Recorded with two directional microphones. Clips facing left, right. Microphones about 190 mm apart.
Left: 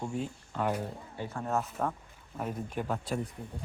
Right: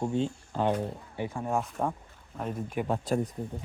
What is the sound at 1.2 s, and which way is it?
Speech, 15° right (ahead or behind).